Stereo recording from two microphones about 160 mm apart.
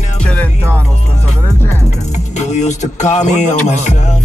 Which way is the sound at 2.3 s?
45° left (ahead or behind).